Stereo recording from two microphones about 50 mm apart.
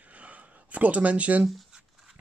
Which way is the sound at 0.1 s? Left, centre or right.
Right.